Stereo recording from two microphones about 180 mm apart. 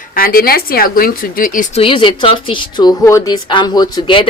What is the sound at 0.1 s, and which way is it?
Speech, 55° left (ahead or behind).